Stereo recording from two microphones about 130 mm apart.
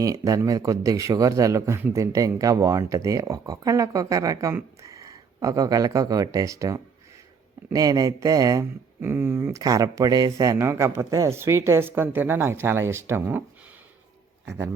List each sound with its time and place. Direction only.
0.0 s speech: 25° right (ahead or behind)